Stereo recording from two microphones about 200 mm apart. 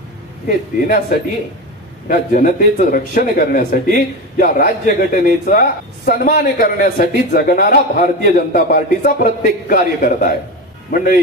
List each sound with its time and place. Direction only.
0.5 s speech: 45° left (ahead or behind)
2.0 s speech: 45° left (ahead or behind)